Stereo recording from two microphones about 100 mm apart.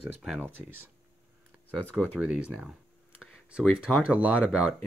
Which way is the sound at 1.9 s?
10° right (ahead or behind).